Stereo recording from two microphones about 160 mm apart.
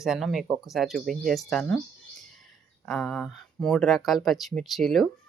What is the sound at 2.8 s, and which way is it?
Speech, 5° left (ahead or behind).